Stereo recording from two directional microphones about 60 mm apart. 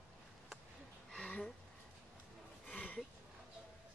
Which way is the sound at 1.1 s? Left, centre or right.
Centre.